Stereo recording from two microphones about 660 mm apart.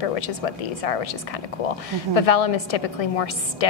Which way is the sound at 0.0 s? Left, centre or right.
Left.